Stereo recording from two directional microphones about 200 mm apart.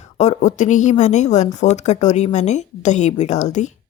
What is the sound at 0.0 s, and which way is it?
Speech, 35° left (ahead or behind).